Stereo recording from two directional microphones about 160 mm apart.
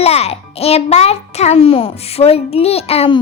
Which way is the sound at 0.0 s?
40° left (ahead or behind).